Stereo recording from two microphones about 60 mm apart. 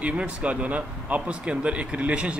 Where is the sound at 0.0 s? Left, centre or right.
Right.